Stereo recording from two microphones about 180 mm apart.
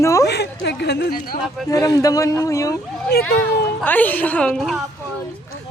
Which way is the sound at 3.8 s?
10° left (ahead or behind).